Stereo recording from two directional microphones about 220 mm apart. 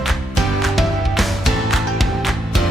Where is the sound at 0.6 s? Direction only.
Centre (ahead or behind).